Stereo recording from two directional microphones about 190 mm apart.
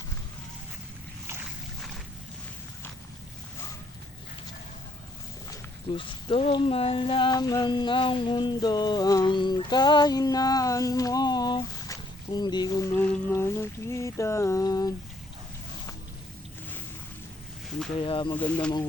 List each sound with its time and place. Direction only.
5.9 s speech: 25° left (ahead or behind)
18.0 s speech: 25° left (ahead or behind)
18.3 s speech: 5° left (ahead or behind)